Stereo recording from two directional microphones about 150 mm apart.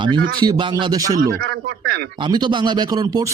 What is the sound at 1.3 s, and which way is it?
Speech, 90° right.